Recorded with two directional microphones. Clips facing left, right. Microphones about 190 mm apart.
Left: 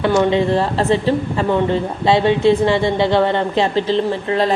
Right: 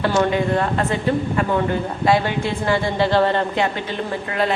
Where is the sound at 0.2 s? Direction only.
25° left (ahead or behind).